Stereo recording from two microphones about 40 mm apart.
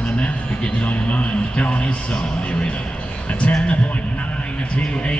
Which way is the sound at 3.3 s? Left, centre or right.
Left.